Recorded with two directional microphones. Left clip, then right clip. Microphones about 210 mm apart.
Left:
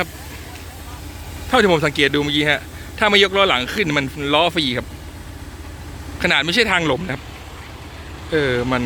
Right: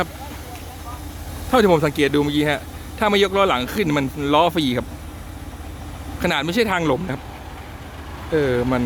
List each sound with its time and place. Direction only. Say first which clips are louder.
1.5 s speech: left 1 dB; centre (ahead or behind)
6.1 s speech: left 4 dB; 5° right (ahead or behind)
8.3 s speech: left 1 dB; centre (ahead or behind)